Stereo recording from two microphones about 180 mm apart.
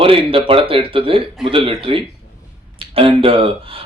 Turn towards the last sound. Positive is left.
turn(degrees=-30)  # may be behind; listen again after turning